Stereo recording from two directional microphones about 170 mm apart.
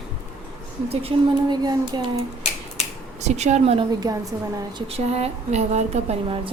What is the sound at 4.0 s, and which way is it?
Speech, 20° right (ahead or behind).